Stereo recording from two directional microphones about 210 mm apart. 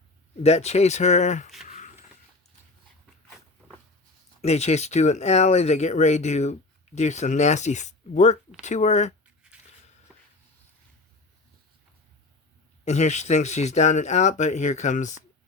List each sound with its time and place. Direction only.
0.4 s speech: 30° left (ahead or behind)
1.6 s a sound: 35° left (ahead or behind)
4.4 s speech: 30° left (ahead or behind)
12.8 s speech: 35° left (ahead or behind)